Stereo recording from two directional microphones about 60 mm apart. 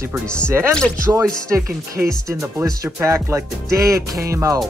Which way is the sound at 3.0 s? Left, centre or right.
Right.